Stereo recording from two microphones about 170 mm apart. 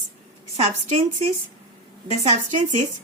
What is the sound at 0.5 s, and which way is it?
Speech, 40° right (ahead or behind).